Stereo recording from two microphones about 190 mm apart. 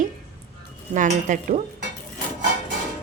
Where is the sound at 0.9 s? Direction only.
40° right (ahead or behind).